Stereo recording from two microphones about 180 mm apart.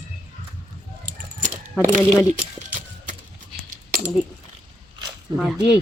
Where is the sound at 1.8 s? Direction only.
45° right (ahead or behind).